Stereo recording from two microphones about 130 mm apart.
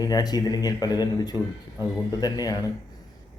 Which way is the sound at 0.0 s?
30° left (ahead or behind).